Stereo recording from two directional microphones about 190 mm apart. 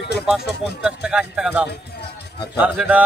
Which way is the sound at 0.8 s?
5° right (ahead or behind).